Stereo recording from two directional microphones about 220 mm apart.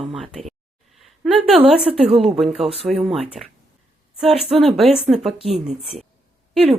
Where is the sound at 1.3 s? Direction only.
25° right (ahead or behind).